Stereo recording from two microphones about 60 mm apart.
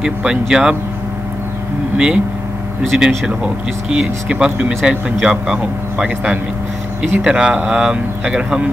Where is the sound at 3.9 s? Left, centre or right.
Centre.